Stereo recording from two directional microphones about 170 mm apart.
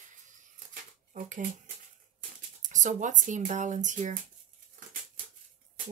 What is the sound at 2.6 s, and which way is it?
Speech, 45° right (ahead or behind).